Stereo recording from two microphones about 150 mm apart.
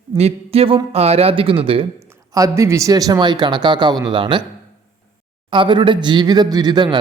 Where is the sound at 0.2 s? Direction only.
40° right (ahead or behind).